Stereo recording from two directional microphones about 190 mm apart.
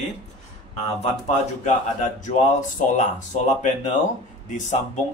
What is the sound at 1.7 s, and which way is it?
Speech, 40° left (ahead or behind).